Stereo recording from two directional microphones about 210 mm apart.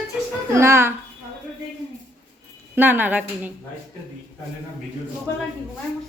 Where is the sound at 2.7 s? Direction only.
10° right (ahead or behind).